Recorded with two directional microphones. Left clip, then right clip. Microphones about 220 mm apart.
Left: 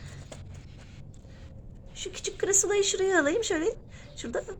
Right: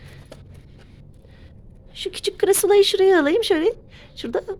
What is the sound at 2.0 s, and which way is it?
A woman's voice, 50° right (ahead or behind).